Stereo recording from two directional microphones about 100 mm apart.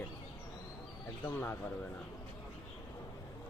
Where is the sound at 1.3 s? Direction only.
20° left (ahead or behind).